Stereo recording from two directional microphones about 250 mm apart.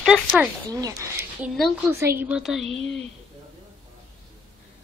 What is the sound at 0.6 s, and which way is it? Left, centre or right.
Speech, centre.